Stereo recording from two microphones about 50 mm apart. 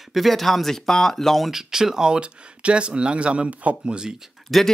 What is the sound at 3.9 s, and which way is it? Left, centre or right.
Speech, centre.